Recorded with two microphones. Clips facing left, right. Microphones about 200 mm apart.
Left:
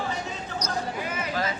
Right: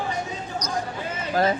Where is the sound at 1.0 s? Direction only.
30° right (ahead or behind).